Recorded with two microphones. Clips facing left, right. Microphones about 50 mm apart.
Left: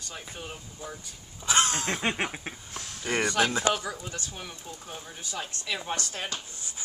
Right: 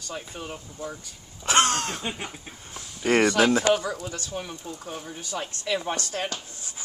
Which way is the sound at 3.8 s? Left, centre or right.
Right.